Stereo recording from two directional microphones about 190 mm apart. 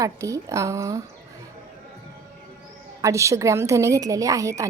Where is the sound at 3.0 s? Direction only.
15° right (ahead or behind).